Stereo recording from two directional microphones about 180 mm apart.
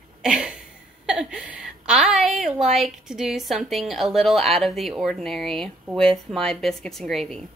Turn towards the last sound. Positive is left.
turn(degrees=0)  # may be behind; listen again after turning